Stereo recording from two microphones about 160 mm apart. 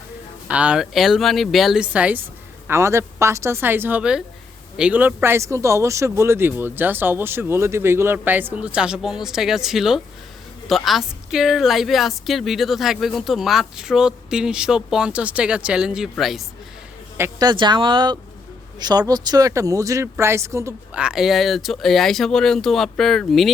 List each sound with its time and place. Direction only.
0.4 s a woman's voice: 5° right (ahead or behind)
17.2 s speech: 15° right (ahead or behind)
17.5 s speech: 30° right (ahead or behind)
21.0 s a woman's voice: 5° right (ahead or behind)